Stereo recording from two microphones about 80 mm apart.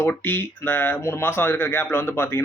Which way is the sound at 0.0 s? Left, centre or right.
Left.